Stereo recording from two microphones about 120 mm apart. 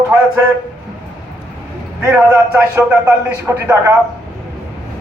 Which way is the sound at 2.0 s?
20° right (ahead or behind).